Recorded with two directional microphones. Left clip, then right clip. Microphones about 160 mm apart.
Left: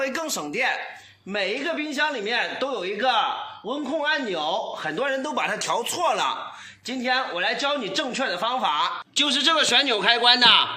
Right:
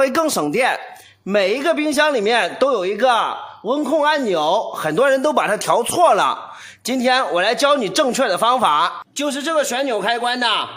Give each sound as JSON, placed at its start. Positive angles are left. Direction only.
{"t": 0.0, "sound": "a man's voice", "side_deg": -75}
{"t": 6.8, "sound": "speech", "side_deg": -90}
{"t": 9.1, "sound": "a man's voice", "side_deg": -55}